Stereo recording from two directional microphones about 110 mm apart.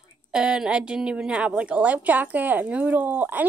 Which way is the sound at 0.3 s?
5° right (ahead or behind).